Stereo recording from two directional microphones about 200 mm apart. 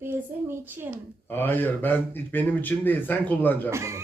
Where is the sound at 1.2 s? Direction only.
10° left (ahead or behind).